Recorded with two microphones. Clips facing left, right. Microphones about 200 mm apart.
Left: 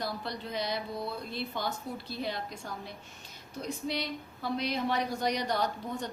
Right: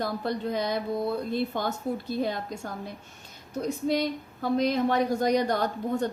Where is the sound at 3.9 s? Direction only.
45° right (ahead or behind).